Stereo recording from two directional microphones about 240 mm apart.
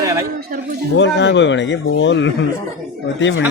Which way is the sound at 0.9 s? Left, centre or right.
Left.